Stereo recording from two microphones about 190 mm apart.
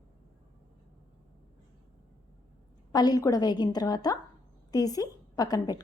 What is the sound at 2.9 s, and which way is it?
A woman's voice, 20° left (ahead or behind).